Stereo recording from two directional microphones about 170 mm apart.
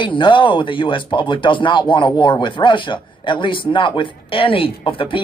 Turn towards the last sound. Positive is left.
turn(degrees=30)  # may be behind; listen again after turning